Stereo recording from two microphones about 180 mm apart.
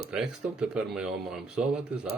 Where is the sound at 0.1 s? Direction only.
5° right (ahead or behind).